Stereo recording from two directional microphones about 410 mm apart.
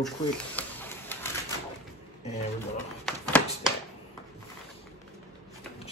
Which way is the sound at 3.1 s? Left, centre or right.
Centre.